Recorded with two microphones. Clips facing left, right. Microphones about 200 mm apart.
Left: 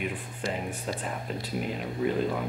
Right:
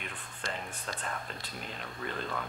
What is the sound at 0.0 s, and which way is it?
Speech, 10° left (ahead or behind).